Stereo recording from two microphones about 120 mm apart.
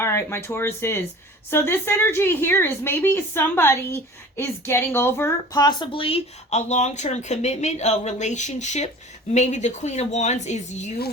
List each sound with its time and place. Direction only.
0.0 s speech: 20° left (ahead or behind)
5.5 s speech: 35° left (ahead or behind); by 10.9 s 75° left (ahead or behind)